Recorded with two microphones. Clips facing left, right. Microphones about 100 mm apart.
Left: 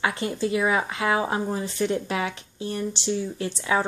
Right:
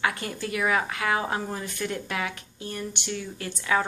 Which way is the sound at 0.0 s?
25° left (ahead or behind).